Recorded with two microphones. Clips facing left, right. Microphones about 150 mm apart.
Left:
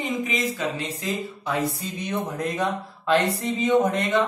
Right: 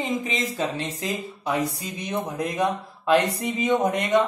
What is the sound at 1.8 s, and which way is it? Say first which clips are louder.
A man's voice: left 1 dB; 15° right (ahead or behind).